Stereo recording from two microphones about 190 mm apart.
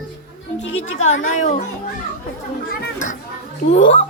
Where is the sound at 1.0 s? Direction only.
40° left (ahead or behind).